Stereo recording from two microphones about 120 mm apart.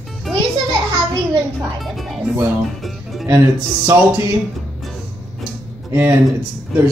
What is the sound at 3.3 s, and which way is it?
Speech, 25° right (ahead or behind).